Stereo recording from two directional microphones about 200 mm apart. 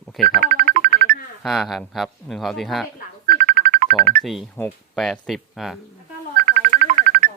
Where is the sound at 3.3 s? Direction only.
40° right (ahead or behind).